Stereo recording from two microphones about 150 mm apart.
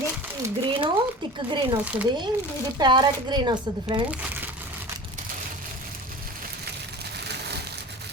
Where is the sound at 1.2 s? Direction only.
35° right (ahead or behind).